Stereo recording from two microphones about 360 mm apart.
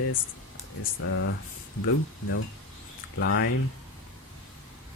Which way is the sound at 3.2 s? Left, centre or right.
Left.